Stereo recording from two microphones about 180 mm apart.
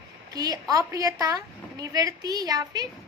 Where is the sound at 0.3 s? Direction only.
20° right (ahead or behind).